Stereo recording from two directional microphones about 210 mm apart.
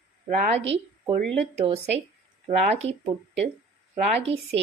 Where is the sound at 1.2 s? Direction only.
5° left (ahead or behind).